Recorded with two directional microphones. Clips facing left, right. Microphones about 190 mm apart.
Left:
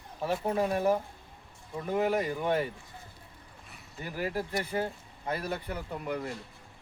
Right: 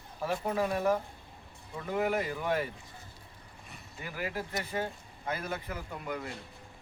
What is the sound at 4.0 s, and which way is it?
Speech, 35° left (ahead or behind).